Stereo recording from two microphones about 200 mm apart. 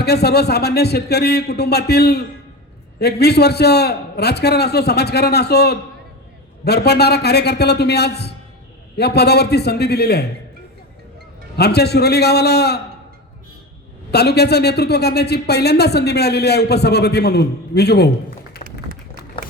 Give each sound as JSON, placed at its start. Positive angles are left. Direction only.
{"t": 0.0, "sound": "a man's voice", "side_deg": 55}
{"t": 11.5, "sound": "a man's voice", "side_deg": 55}
{"t": 14.1, "sound": "speech", "side_deg": 55}
{"t": 18.5, "sound": "a sound", "side_deg": 50}